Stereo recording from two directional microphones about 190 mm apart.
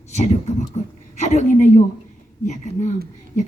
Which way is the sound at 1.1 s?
35° left (ahead or behind).